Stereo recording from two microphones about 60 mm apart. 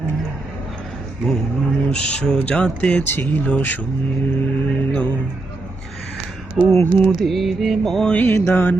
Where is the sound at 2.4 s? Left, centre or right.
Left.